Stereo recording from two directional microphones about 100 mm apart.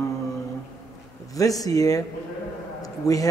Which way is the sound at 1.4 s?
35° left (ahead or behind).